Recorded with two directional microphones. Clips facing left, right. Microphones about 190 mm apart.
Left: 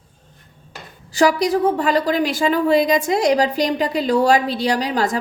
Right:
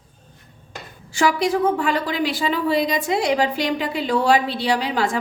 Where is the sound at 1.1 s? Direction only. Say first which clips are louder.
Left 3 dB; 40° left (ahead or behind).